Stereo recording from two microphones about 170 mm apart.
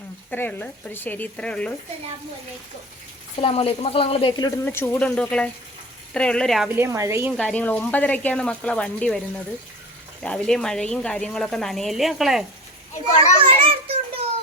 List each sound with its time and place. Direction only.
0.3 s speech: 10° left (ahead or behind)
3.3 s a woman's voice: 35° left (ahead or behind); by 6.7 s centre (ahead or behind)
6.7 s a woman's voice: 15° right (ahead or behind)
7.3 s speech: 5° left (ahead or behind)
10.2 s a woman's voice: 5° left (ahead or behind)
13.4 s a sound: 30° right (ahead or behind)